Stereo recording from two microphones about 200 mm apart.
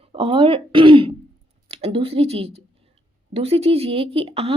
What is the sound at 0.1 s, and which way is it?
Speech, 25° right (ahead or behind).